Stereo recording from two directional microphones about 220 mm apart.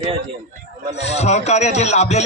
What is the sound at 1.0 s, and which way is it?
Speech, 30° left (ahead or behind).